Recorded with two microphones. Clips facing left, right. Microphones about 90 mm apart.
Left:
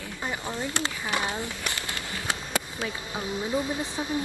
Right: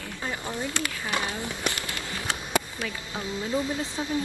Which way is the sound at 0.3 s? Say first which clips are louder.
Even; 20° left (ahead or behind).